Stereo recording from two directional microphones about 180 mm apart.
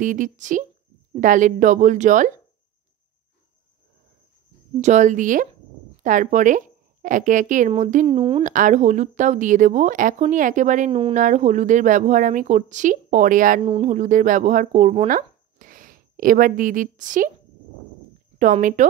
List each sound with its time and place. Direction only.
0.0 s a woman's voice: 45° right (ahead or behind)
4.7 s a woman's voice: 40° right (ahead or behind)
8.2 s speech: 30° right (ahead or behind)
8.5 s a woman's voice: 45° right (ahead or behind)
10.9 s speech: 30° right (ahead or behind)
11.1 s a woman's voice: 45° right (ahead or behind)
18.4 s a woman's voice: 45° right (ahead or behind)